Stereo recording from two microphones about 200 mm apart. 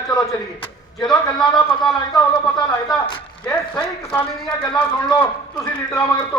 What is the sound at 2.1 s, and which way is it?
Speech, 20° left (ahead or behind).